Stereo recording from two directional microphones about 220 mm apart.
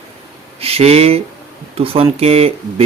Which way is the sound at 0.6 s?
25° right (ahead or behind).